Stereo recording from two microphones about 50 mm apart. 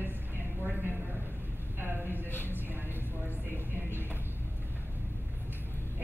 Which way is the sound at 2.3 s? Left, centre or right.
Left.